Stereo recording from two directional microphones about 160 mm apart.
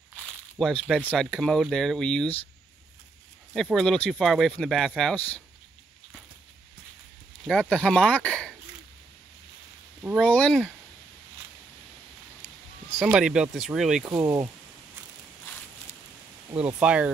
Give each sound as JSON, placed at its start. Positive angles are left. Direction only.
{"t": 0.6, "sound": "speech", "side_deg": 0}
{"t": 3.5, "sound": "speech", "side_deg": 5}
{"t": 7.4, "sound": "speech", "side_deg": 5}
{"t": 10.1, "sound": "speech", "side_deg": 10}
{"t": 12.9, "sound": "speech", "side_deg": -5}
{"t": 14.0, "sound": "speech", "side_deg": -20}
{"t": 16.5, "sound": "speech", "side_deg": -10}